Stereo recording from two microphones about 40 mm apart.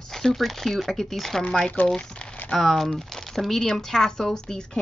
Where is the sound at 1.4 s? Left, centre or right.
Left.